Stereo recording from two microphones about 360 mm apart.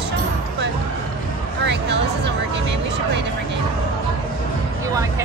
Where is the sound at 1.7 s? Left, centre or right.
Right.